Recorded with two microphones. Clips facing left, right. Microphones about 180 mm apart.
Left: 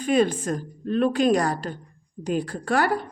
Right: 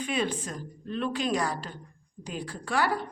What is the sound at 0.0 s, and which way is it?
A woman's voice, 45° left (ahead or behind).